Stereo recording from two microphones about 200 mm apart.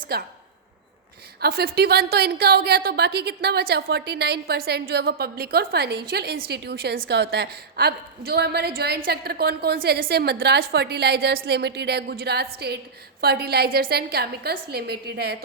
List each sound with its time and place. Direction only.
0.1 s a woman's voice: 50° right (ahead or behind)
1.4 s a woman's voice: 50° right (ahead or behind)